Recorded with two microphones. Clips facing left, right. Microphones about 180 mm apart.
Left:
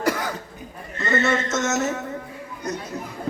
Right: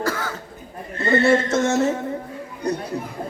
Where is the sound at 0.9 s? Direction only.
30° right (ahead or behind).